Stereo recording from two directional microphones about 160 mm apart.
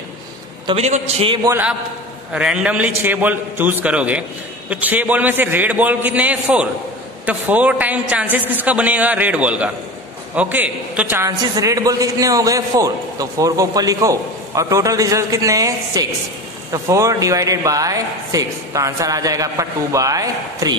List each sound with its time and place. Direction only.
0.7 s a man's voice: 45° right (ahead or behind)
1.4 s a woman's voice: 10° right (ahead or behind)